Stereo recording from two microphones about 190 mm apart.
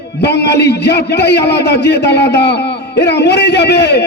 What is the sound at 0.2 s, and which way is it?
A man's voice, 60° left (ahead or behind).